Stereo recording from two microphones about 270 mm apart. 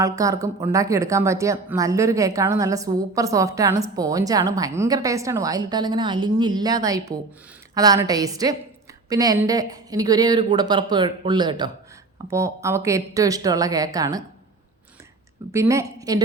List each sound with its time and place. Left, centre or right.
0.0 s speech: centre
15.5 s speech: centre